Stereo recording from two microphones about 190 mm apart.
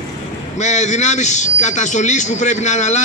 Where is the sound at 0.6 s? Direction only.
40° left (ahead or behind).